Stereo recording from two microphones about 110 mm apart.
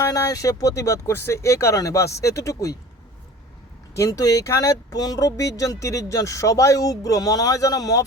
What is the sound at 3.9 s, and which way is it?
Speech, 30° left (ahead or behind).